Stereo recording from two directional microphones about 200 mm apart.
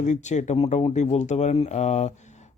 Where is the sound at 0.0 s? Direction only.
35° left (ahead or behind).